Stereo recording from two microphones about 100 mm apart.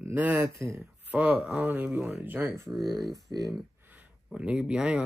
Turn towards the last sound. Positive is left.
turn(degrees=-10)  # may be behind; listen again after turning